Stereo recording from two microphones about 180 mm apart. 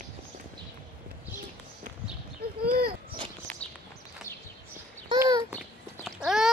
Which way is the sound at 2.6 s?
55° right (ahead or behind).